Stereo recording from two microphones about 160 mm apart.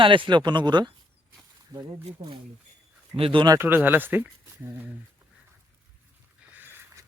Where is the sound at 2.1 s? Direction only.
35° right (ahead or behind); by 4.9 s 10° right (ahead or behind).